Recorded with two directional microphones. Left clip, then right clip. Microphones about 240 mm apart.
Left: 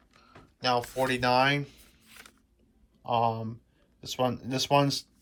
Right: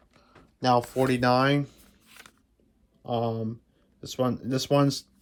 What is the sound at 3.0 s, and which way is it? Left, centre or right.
Speech, centre.